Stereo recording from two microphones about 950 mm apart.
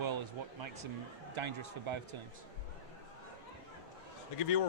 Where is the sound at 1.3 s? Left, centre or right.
Right.